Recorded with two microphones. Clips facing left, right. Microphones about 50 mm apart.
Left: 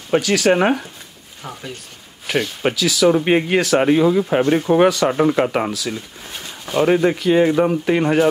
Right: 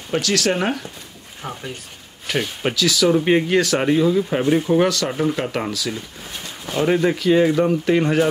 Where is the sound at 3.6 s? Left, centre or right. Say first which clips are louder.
Left 3 dB; centre.